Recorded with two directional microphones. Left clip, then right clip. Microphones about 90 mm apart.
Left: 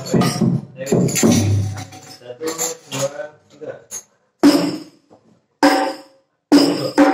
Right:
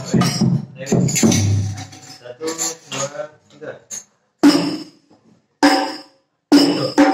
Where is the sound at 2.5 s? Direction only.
35° right (ahead or behind).